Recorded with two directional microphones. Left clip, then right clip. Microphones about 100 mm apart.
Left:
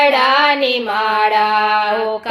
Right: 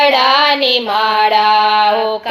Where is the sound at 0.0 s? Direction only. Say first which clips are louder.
Right 2 dB; 15° right (ahead or behind).